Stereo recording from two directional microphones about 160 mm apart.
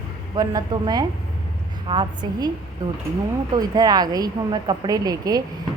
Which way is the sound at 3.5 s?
25° right (ahead or behind).